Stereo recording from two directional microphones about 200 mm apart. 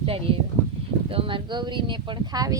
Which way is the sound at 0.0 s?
30° right (ahead or behind).